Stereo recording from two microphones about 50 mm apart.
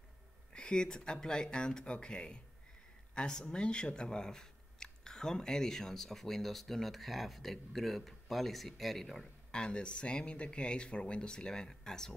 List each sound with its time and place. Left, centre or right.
0.6 s speech: centre
9.5 s speech: centre